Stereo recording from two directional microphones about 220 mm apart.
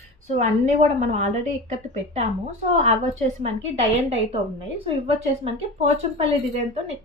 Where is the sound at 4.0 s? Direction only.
30° right (ahead or behind).